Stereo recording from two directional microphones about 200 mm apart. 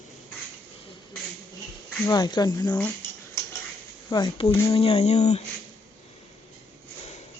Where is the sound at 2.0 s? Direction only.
20° left (ahead or behind).